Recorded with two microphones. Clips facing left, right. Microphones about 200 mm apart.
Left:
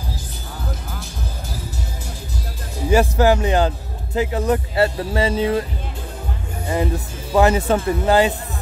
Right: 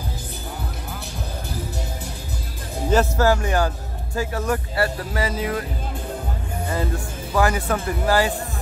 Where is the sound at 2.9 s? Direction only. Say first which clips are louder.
Left 3 dB; 15° left (ahead or behind).